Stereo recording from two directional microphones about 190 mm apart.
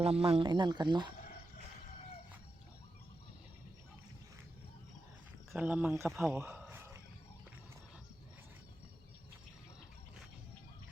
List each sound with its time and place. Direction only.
0.0 s speech: 30° right (ahead or behind)
5.5 s speech: 5° right (ahead or behind)
6.1 s a sound: 5° right (ahead or behind)